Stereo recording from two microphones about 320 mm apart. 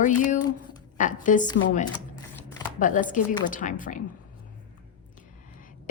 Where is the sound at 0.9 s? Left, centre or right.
Left.